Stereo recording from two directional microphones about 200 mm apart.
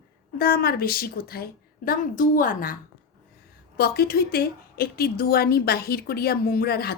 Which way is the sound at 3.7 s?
50° left (ahead or behind).